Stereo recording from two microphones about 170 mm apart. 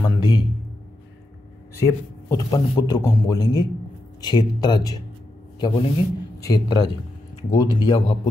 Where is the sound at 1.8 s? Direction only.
20° left (ahead or behind).